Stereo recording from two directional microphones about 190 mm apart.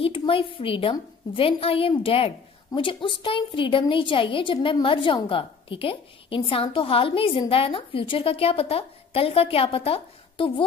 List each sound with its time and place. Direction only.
0.0 s a woman's voice: 30° left (ahead or behind)